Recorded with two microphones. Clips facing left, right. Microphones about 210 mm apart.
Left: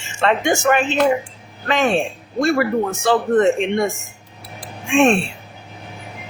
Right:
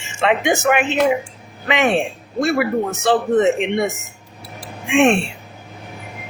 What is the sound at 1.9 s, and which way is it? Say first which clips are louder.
Speech: even; centre (ahead or behind).